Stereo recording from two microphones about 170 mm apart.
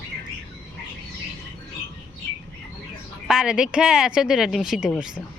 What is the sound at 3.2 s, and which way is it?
Speech, 5° right (ahead or behind).